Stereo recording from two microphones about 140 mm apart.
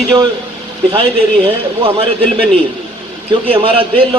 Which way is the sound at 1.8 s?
40° right (ahead or behind).